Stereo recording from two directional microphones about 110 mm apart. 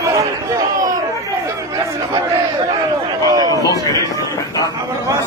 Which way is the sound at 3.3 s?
35° right (ahead or behind).